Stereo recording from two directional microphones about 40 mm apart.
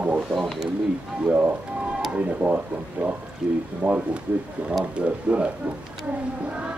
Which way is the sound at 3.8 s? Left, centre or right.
Right.